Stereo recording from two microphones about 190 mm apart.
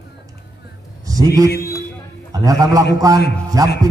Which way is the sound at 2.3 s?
20° right (ahead or behind).